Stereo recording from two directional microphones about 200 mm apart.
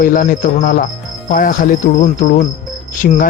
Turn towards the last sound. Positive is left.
turn(degrees=40)  # may be behind; listen again after turning